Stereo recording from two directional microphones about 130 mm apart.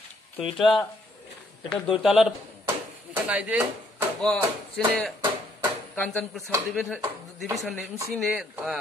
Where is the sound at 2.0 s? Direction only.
5° right (ahead or behind).